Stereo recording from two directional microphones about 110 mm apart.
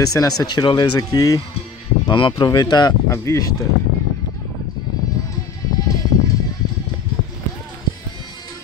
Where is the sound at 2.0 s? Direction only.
45° left (ahead or behind).